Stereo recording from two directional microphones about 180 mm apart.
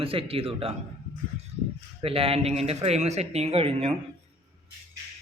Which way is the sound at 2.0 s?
30° right (ahead or behind).